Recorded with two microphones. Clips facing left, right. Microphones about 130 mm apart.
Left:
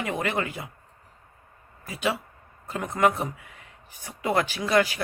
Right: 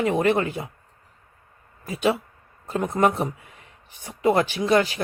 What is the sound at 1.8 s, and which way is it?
Speech, 25° right (ahead or behind).